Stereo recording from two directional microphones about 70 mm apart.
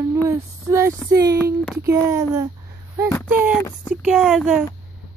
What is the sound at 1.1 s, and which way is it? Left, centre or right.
Speech, right.